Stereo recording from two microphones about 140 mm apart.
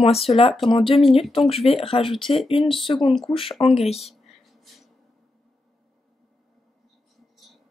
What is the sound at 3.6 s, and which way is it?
Speech, 45° left (ahead or behind).